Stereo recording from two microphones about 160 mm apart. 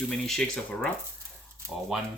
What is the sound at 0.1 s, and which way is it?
Speech, 5° left (ahead or behind).